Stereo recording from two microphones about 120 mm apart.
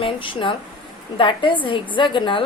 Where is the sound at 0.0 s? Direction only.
45° left (ahead or behind).